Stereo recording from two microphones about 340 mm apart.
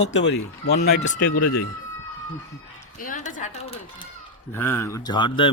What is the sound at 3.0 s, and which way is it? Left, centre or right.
Speech, left.